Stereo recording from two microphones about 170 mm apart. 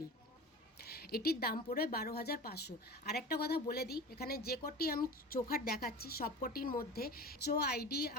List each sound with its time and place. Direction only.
0.8 s a woman's voice: 65° left (ahead or behind)